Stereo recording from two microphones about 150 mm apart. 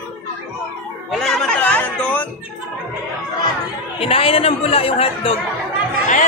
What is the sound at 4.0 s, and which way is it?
Speech, 40° left (ahead or behind).